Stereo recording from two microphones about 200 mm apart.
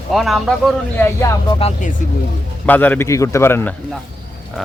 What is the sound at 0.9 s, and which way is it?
Speech, 15° left (ahead or behind).